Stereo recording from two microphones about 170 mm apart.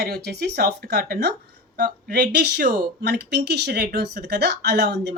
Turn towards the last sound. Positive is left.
turn(degrees=-75)  # may be behind; listen again after turning